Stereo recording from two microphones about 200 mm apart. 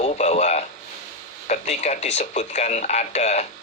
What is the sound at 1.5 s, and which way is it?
Speech, 35° left (ahead or behind).